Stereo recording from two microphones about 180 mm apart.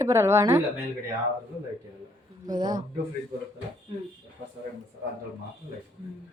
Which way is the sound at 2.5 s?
25° right (ahead or behind).